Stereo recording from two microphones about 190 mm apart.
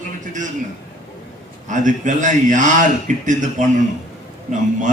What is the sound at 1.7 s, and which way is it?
A man's voice, 40° right (ahead or behind).